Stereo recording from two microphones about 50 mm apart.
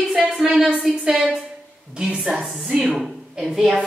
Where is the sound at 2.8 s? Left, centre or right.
Centre.